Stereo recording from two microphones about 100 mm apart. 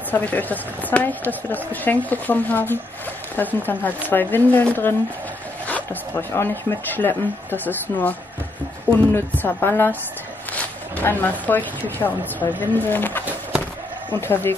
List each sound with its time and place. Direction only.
0.1 s a woman's voice: 15° left (ahead or behind)
11.0 s speech: 20° left (ahead or behind)
14.2 s speech: 20° left (ahead or behind)